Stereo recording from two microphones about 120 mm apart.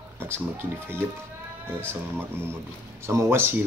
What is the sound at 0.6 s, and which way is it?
Speech, 20° right (ahead or behind).